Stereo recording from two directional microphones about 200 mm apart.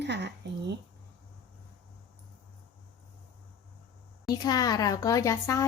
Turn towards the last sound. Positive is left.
turn(degrees=15)  # may be behind; listen again after turning